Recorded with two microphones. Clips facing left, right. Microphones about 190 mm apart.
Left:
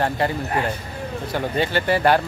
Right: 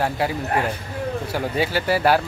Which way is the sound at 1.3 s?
5° right (ahead or behind).